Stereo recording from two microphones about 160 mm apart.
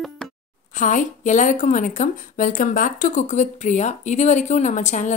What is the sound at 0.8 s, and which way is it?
A woman's voice, 50° left (ahead or behind).